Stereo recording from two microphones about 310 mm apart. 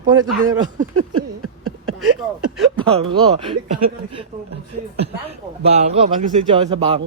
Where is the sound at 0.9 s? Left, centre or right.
Right.